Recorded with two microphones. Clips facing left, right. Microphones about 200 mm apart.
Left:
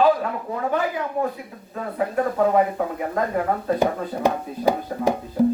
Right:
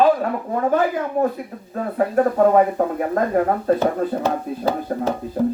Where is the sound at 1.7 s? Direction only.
45° right (ahead or behind).